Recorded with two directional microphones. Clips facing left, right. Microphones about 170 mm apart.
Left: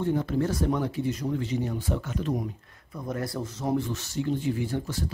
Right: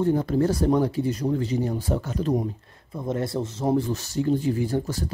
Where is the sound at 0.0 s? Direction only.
40° right (ahead or behind).